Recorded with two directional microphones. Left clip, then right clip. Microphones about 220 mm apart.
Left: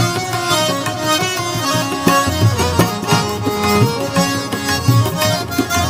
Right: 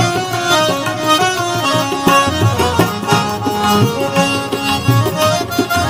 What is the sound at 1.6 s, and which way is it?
Music, 20° left (ahead or behind).